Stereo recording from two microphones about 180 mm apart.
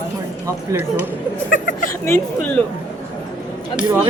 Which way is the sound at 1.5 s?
50° left (ahead or behind).